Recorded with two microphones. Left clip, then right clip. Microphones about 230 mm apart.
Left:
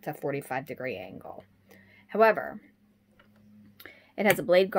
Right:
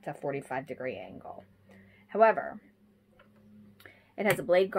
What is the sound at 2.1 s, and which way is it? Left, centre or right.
Speech, left.